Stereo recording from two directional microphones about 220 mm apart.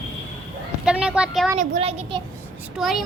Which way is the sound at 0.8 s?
5° right (ahead or behind).